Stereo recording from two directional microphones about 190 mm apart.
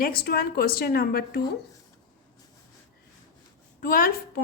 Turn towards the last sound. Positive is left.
turn(degrees=50)  # may be behind; listen again after turning